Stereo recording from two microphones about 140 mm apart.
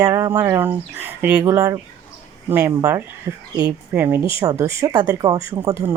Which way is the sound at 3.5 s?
25° right (ahead or behind).